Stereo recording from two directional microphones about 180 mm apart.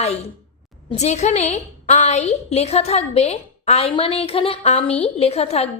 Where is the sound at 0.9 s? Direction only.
40° left (ahead or behind).